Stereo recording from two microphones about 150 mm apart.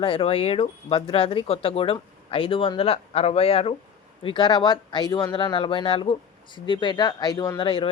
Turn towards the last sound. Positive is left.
turn(degrees=35)  # may be behind; listen again after turning